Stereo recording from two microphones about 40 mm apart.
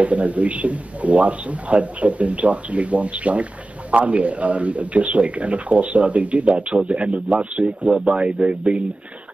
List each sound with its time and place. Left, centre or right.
0.0 s a man's voice: right